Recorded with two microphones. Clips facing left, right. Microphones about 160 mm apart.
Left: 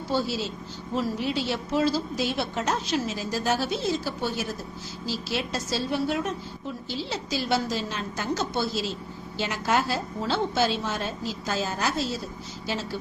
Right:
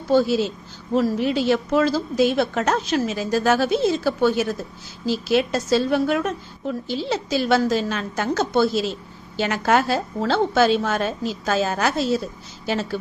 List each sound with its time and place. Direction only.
0.1 s a woman's voice: 50° right (ahead or behind)